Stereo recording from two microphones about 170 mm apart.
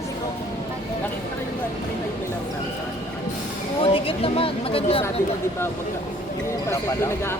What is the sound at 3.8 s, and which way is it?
A woman's voice, 35° left (ahead or behind).